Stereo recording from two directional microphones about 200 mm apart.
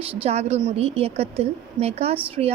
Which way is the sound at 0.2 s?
30° right (ahead or behind).